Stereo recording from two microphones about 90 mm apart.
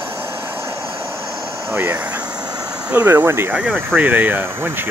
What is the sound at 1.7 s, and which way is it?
Speech, 20° right (ahead or behind).